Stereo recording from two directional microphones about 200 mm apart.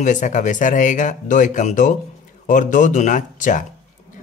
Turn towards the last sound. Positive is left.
turn(degrees=40)  # may be behind; listen again after turning